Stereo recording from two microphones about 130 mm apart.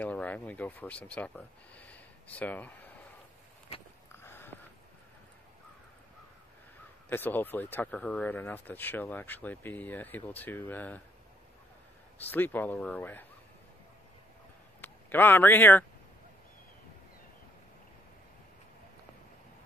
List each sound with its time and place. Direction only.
0.0 s speech: 10° left (ahead or behind)
4.1 s a sound: 20° left (ahead or behind)
7.1 s speech: 15° left (ahead or behind)
12.3 s speech: 15° left (ahead or behind)
14.8 s speech: 15° left (ahead or behind)